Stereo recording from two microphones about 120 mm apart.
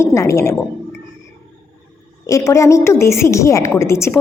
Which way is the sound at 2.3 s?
25° left (ahead or behind).